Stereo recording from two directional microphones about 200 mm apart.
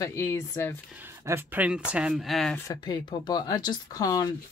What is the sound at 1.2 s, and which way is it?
Speech, 10° right (ahead or behind).